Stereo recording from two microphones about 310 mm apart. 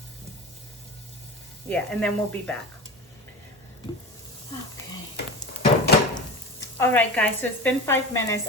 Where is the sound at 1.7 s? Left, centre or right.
Centre.